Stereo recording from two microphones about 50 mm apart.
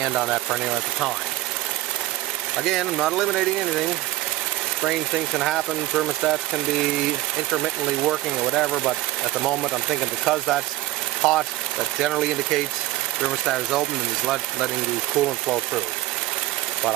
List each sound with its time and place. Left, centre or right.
0.1 s speech: centre
2.5 s speech: centre
4.8 s speech: centre
7.6 s speech: centre